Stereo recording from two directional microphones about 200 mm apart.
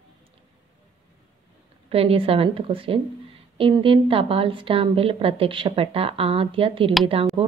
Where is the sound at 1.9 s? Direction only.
30° right (ahead or behind).